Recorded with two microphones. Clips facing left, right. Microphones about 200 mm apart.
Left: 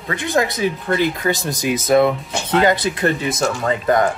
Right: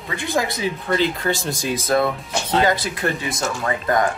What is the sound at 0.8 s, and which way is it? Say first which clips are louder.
Speech: even; 10° left (ahead or behind).